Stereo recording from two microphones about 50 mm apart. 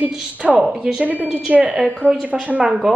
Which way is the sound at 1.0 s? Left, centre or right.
Right.